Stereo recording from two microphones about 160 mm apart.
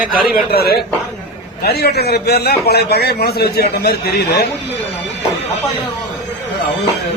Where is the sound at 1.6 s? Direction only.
90° left.